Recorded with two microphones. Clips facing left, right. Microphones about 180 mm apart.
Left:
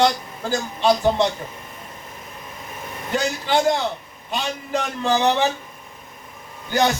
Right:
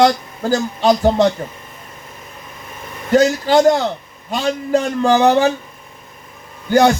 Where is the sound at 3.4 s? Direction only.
40° right (ahead or behind).